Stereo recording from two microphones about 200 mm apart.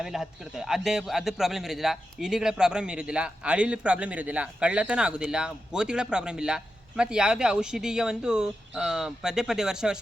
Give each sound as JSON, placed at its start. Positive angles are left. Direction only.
{"t": 0.0, "sound": "a man's voice", "side_deg": 0}